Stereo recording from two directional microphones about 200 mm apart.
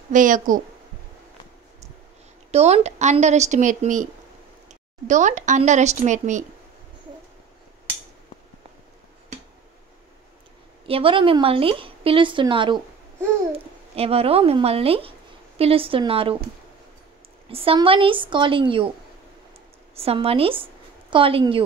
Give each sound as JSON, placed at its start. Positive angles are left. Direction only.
{"t": 0.1, "sound": "speech", "side_deg": -40}
{"t": 2.5, "sound": "speech", "side_deg": -35}
{"t": 10.9, "sound": "a woman's voice", "side_deg": -25}
{"t": 17.5, "sound": "a woman's voice", "side_deg": -30}
{"t": 20.0, "sound": "a woman's voice", "side_deg": -30}